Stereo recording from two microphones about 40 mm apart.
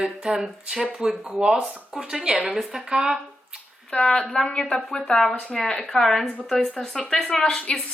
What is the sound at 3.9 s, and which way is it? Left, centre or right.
A woman's voice, left.